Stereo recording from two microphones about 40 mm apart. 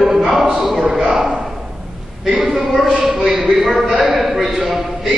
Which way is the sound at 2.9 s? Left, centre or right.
Centre.